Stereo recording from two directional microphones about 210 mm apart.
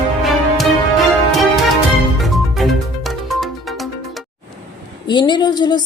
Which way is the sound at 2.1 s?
Centre (ahead or behind).